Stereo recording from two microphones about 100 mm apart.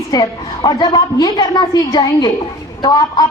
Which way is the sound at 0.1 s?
45° left (ahead or behind).